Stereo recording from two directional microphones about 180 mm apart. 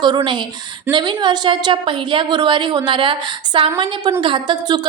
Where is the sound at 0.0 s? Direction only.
25° right (ahead or behind).